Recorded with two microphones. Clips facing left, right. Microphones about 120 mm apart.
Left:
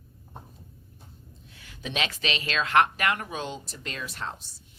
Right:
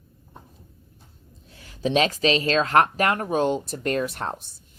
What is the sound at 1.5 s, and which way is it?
Speech, 35° right (ahead or behind).